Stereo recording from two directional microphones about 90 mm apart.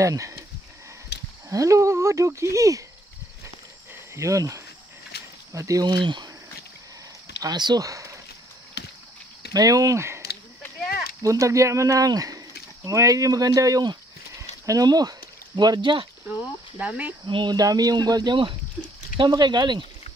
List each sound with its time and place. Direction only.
0.0 s speech: 35° right (ahead or behind)
1.5 s speech: 35° right (ahead or behind)
3.9 s cricket: 35° right (ahead or behind)
5.5 s speech: 35° right (ahead or behind)
5.9 s speech: 55° right (ahead or behind)
7.4 s speech: 50° right (ahead or behind)
9.5 s speech: 40° right (ahead or behind)
11.2 s speech: 35° right (ahead or behind)
14.3 s a sound: 40° right (ahead or behind); by 16.1 s 65° right (ahead or behind)
16.7 s speech: 15° right (ahead or behind)
17.3 s speech: 65° right (ahead or behind)
17.6 s speech: 45° right (ahead or behind)